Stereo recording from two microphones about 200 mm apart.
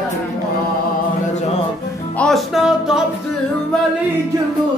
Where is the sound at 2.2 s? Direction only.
Centre (ahead or behind).